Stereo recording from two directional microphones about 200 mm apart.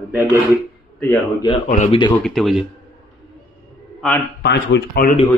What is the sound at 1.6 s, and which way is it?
Speech, 40° left (ahead or behind).